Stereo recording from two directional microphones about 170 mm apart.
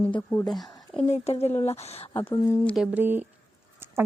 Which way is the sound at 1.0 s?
40° left (ahead or behind).